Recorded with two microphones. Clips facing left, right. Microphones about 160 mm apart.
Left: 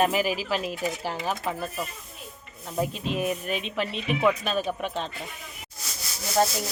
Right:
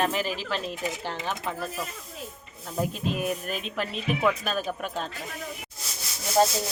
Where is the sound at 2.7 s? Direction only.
Centre (ahead or behind).